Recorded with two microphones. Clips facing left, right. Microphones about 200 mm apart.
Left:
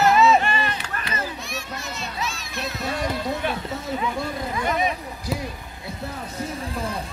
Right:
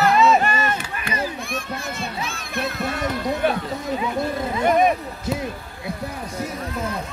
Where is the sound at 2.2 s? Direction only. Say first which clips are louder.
Right 2 dB; 55° right (ahead or behind).